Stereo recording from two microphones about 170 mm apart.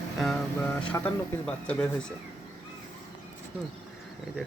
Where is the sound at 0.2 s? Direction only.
5° left (ahead or behind).